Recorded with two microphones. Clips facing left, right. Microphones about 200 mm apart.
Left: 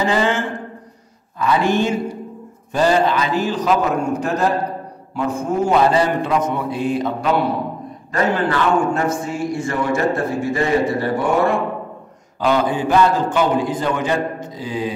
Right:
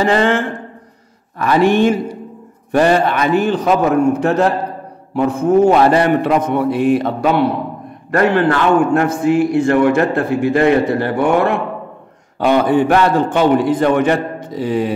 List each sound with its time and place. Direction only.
0.0 s a man's voice: 60° right (ahead or behind)